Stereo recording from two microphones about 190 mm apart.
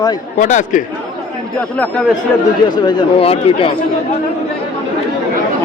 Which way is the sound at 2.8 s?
25° left (ahead or behind).